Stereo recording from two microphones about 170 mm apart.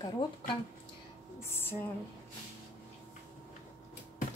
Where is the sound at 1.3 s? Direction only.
15° left (ahead or behind).